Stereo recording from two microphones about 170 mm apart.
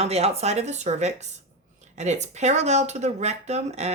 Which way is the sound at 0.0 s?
40° right (ahead or behind).